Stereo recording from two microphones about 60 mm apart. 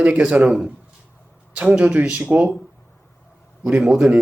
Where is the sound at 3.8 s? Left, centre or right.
Centre.